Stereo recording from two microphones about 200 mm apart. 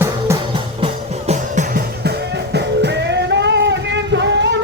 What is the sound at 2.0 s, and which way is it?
Music, 55° right (ahead or behind).